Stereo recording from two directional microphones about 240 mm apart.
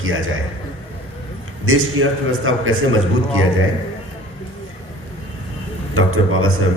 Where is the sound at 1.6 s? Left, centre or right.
Right.